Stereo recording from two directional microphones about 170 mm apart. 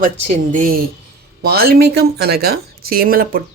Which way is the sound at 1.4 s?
65° right (ahead or behind).